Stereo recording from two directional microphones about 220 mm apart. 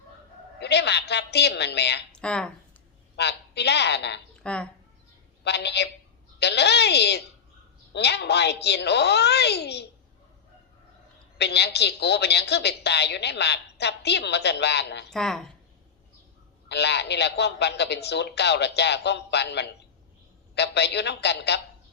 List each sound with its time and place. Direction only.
0.6 s a woman's voice: 50° left (ahead or behind)
2.1 s speech: 5° left (ahead or behind)
3.2 s a woman's voice: 50° left (ahead or behind)
4.4 s speech: 5° left (ahead or behind)
5.4 s a woman's voice: 50° left (ahead or behind)
11.3 s a woman's voice: 50° left (ahead or behind)
15.1 s speech: centre (ahead or behind)
16.6 s a woman's voice: 50° left (ahead or behind)